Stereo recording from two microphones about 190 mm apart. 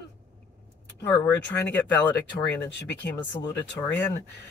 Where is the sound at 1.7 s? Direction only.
10° left (ahead or behind).